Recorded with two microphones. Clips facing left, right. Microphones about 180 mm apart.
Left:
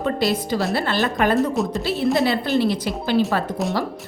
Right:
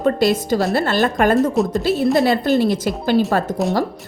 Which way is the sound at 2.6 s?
45° right (ahead or behind).